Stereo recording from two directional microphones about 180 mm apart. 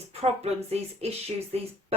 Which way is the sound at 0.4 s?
35° right (ahead or behind).